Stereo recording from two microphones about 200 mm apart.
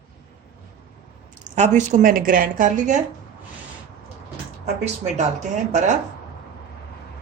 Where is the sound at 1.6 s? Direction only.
35° right (ahead or behind).